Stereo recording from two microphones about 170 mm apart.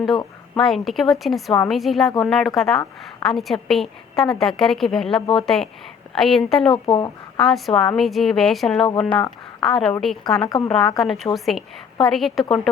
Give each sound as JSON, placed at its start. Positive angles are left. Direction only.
{"t": 0.6, "sound": "a woman's voice", "side_deg": 0}
{"t": 5.2, "sound": "speech", "side_deg": 30}
{"t": 6.1, "sound": "a woman's voice", "side_deg": 0}
{"t": 6.8, "sound": "speech", "side_deg": 25}
{"t": 7.3, "sound": "a woman's voice", "side_deg": 0}